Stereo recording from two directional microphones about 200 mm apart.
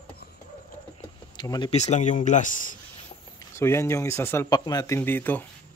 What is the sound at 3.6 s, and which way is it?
Speech, 15° left (ahead or behind).